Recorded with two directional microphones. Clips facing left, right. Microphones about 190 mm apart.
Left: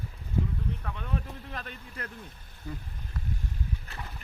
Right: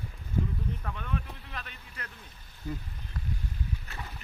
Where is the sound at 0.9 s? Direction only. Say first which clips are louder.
Left 1 dB; 35° left (ahead or behind).